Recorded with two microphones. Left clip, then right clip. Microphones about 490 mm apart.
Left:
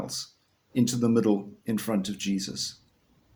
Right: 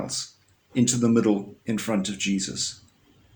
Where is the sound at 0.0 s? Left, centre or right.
Left.